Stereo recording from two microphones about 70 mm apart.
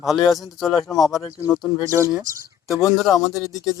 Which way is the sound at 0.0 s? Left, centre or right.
Centre.